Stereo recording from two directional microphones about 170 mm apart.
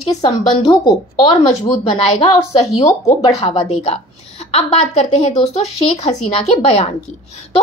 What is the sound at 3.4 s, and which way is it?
Speech, 35° left (ahead or behind).